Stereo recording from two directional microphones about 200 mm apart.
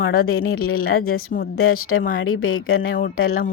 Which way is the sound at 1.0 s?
45° left (ahead or behind).